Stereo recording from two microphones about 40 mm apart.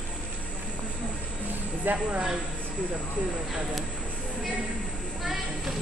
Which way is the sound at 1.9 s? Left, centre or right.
Right.